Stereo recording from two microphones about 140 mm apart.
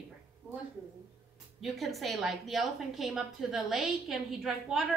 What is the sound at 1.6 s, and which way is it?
A woman's voice, centre (ahead or behind).